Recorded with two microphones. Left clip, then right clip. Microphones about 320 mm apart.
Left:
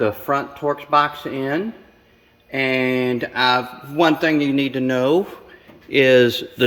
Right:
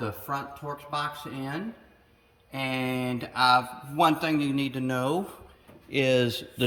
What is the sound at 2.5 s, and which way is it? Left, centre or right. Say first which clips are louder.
Speech: left 11 dB; centre.